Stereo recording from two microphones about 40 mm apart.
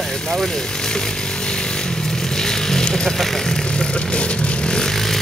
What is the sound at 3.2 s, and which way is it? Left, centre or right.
Speech, centre.